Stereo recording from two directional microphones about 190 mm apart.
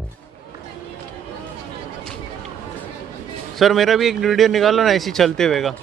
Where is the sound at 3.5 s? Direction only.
Centre (ahead or behind).